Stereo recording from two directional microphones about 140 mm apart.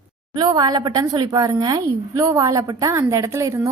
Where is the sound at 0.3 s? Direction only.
30° right (ahead or behind).